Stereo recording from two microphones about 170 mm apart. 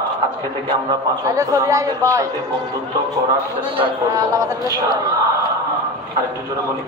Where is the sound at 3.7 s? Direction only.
25° right (ahead or behind).